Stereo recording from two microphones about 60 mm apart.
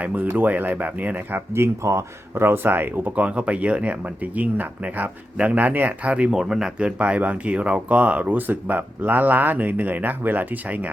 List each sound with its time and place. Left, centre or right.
0.0 s speech: right
1.5 s speech: right
3.2 s speech: right
6.3 s speech: centre; by 10.8 s right